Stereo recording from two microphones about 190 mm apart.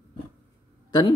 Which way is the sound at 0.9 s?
20° left (ahead or behind).